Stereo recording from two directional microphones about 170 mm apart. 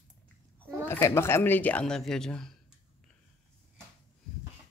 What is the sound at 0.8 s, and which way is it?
Speech, 15° left (ahead or behind).